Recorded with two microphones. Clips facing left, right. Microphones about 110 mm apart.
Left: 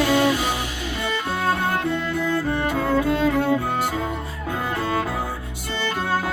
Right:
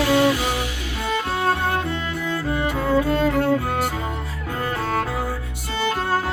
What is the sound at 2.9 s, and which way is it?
Music, centre (ahead or behind).